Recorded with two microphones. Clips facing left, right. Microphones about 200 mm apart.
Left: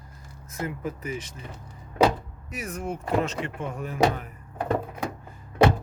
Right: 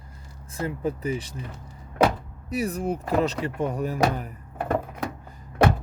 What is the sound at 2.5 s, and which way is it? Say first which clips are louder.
Speech: right 6 dB; 35° right (ahead or behind).